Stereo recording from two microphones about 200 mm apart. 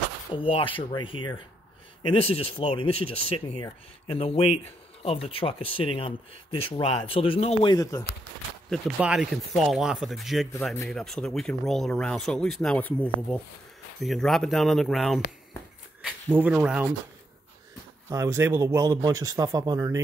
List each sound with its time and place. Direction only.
0.3 s speech: 25° left (ahead or behind)
7.7 s speech: 15° left (ahead or behind)
8.6 s speech: centre (ahead or behind)
18.1 s speech: 15° right (ahead or behind)